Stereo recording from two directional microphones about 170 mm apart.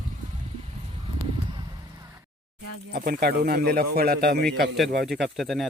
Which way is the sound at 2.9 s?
60° right (ahead or behind).